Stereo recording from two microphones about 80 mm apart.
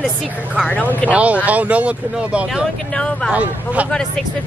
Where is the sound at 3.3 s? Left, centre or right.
Centre.